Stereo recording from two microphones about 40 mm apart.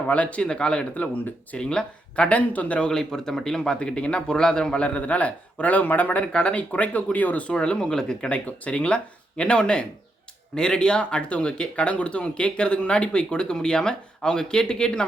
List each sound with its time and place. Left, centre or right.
0.1 s a man's voice: left
0.4 s speech: left
0.9 s a man's voice: left
1.5 s speech: left
2.8 s a man's voice: centre
4.9 s a man's voice: left
6.3 s a man's voice: left
7.4 s speech: left
8.3 s a man's voice: left